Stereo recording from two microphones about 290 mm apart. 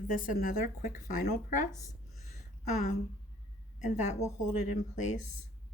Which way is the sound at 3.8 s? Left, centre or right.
Left.